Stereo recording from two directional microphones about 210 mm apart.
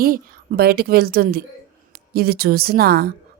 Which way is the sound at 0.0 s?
45° right (ahead or behind).